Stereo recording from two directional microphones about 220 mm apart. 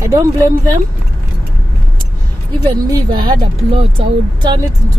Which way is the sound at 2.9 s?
20° right (ahead or behind).